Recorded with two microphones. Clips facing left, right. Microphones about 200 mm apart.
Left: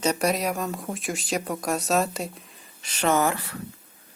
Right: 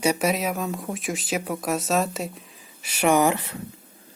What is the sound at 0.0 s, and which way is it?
Speech, 5° right (ahead or behind).